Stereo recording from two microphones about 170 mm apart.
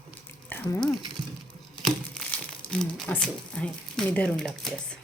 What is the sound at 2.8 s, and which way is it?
Speech, 5° left (ahead or behind).